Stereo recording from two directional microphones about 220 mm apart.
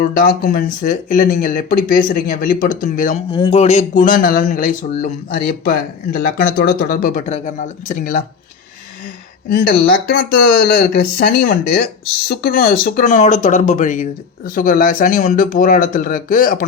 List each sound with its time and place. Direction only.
0.2 s speech: 40° left (ahead or behind)
3.3 s speech: 25° left (ahead or behind)
9.5 s speech: 40° left (ahead or behind)